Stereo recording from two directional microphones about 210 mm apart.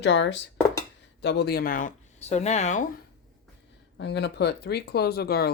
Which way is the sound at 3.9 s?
55° left (ahead or behind).